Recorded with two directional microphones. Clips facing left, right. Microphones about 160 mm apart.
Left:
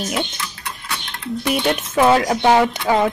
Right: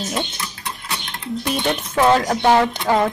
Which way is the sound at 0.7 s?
20° right (ahead or behind).